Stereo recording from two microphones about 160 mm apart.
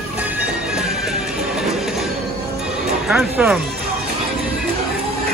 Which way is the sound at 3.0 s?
5° right (ahead or behind).